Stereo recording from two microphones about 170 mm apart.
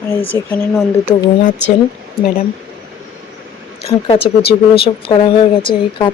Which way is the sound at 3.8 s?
35° left (ahead or behind).